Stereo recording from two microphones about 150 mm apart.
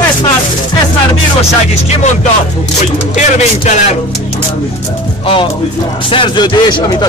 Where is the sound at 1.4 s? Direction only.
45° left (ahead or behind).